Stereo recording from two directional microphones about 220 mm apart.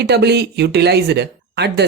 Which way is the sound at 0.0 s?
50° right (ahead or behind).